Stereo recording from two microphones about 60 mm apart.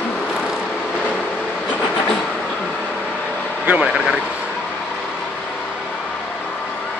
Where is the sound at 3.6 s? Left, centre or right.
Right.